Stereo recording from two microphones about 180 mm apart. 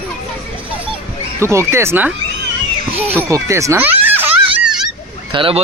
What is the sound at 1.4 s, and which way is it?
Speech, 15° right (ahead or behind).